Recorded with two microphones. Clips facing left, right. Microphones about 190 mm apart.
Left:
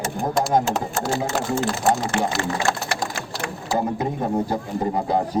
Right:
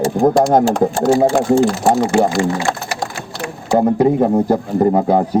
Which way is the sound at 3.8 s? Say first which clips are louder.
Right 15 dB; 65° right (ahead or behind).